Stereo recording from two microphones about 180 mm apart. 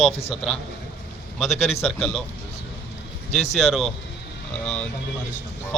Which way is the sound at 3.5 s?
Centre (ahead or behind).